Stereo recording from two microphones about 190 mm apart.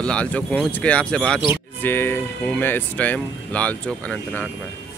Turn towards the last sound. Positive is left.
turn(degrees=5)  # may be behind; listen again after turning